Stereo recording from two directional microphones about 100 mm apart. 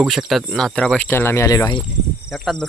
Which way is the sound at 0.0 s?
Centre (ahead or behind).